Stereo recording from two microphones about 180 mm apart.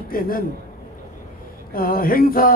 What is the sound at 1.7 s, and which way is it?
Speech, 55° left (ahead or behind).